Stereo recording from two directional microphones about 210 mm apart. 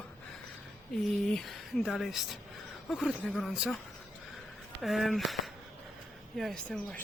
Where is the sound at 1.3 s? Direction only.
Centre (ahead or behind).